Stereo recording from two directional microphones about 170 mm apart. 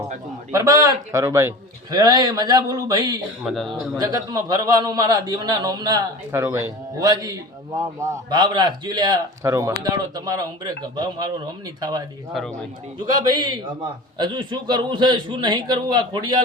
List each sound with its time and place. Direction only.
0.5 s a man's voice: 20° right (ahead or behind)
3.4 s a man's voice: centre (ahead or behind)
3.9 s a man's voice: 20° right (ahead or behind)
12.3 s a man's voice: centre (ahead or behind)
13.2 s a man's voice: 25° right (ahead or behind)